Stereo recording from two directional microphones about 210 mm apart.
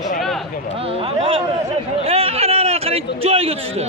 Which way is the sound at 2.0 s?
30° right (ahead or behind).